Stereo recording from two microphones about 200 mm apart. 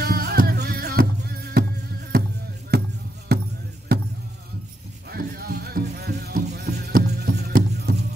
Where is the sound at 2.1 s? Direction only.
50° right (ahead or behind).